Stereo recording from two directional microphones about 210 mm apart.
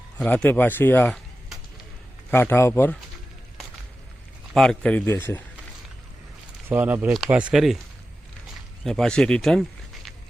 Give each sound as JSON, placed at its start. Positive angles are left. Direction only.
{"t": 0.2, "sound": "speech", "side_deg": 5}
{"t": 4.5, "sound": "speech", "side_deg": 5}
{"t": 6.7, "sound": "speech", "side_deg": -10}
{"t": 8.8, "sound": "speech", "side_deg": 0}